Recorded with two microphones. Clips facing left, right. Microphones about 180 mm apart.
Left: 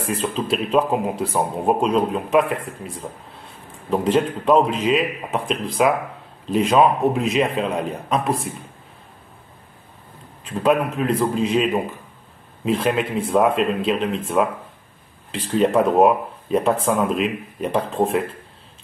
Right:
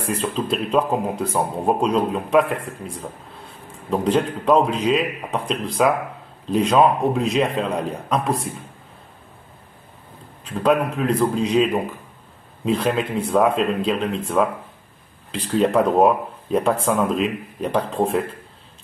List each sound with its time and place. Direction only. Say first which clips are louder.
0.2 s speech: even; 5° left (ahead or behind)
3.9 s speech: left 1 dB; centre (ahead or behind)
10.5 s speech: even; 5° left (ahead or behind)
15.5 s speech: left 1 dB; centre (ahead or behind)